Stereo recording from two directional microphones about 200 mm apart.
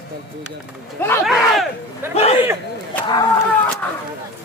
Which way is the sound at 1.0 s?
10° left (ahead or behind).